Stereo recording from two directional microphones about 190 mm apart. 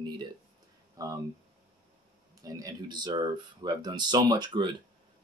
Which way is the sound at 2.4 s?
20° right (ahead or behind).